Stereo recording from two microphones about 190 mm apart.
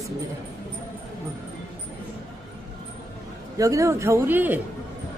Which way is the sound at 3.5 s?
15° right (ahead or behind).